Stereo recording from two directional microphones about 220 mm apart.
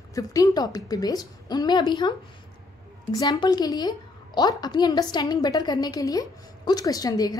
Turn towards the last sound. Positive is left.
turn(degrees=15)  # may be behind; listen again after turning